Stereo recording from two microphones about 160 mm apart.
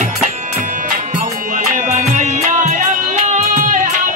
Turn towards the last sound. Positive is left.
turn(degrees=-50)  # may be behind; listen again after turning